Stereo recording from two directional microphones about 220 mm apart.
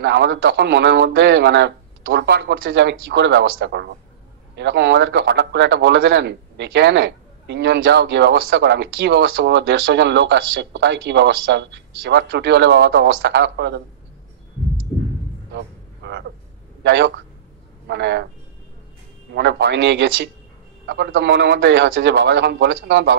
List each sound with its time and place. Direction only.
0.0 s speech: 50° right (ahead or behind)
15.5 s music: 45° right (ahead or behind)
16.8 s a man's voice: 50° right (ahead or behind)
19.3 s speech: 50° right (ahead or behind)